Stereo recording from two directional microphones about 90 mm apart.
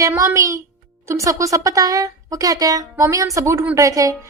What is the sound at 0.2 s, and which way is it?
A woman's voice, 35° right (ahead or behind).